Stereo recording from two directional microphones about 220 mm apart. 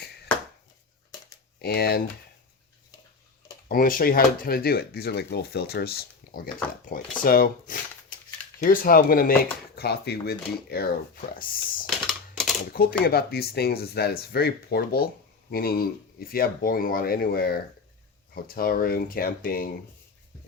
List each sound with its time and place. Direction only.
1.6 s speech: 45° left (ahead or behind)
3.7 s speech: 40° left (ahead or behind)
11.9 s typing: centre (ahead or behind)
12.7 s speech: 40° left (ahead or behind)